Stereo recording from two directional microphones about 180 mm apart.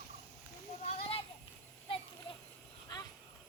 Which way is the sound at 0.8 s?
35° left (ahead or behind).